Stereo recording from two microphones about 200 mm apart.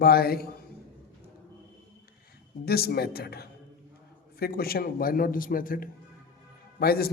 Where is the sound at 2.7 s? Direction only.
50° left (ahead or behind).